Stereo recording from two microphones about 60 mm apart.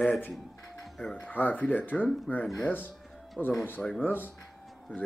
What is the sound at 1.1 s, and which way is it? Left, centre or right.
Speech, left.